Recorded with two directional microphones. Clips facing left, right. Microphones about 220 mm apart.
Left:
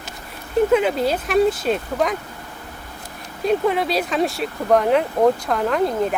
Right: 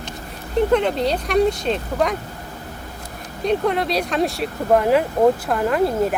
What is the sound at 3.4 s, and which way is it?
Speech, centre (ahead or behind).